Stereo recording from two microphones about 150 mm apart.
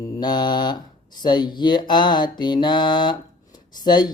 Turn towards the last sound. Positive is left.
turn(degrees=30)  # may be behind; listen again after turning